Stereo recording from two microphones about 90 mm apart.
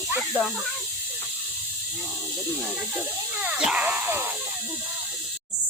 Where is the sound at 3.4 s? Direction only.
15° right (ahead or behind).